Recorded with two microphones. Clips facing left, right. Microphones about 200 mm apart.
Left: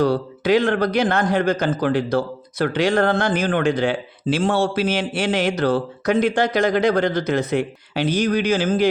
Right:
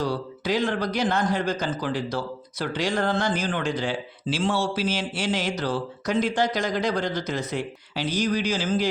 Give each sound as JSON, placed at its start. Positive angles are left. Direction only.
{"t": 0.0, "sound": "a man's voice", "side_deg": 60}